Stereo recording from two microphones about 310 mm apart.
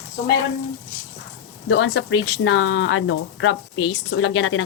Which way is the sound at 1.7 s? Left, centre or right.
Left.